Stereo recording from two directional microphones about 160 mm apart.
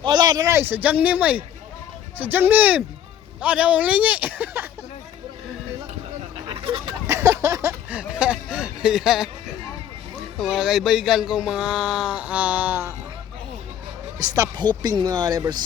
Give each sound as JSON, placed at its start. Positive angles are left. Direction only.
{"t": 0.0, "sound": "speech", "side_deg": -25}
{"t": 6.5, "sound": "fowl", "side_deg": -35}
{"t": 7.1, "sound": "a sound", "side_deg": -20}
{"t": 10.3, "sound": "speech", "side_deg": 0}
{"t": 14.2, "sound": "speech", "side_deg": -20}